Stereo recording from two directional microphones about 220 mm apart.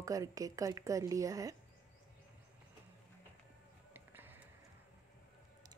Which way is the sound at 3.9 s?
10° right (ahead or behind).